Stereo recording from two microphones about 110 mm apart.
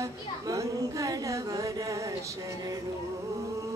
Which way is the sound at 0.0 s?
30° right (ahead or behind).